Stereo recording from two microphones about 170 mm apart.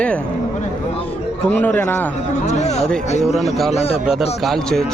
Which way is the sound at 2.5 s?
40° left (ahead or behind).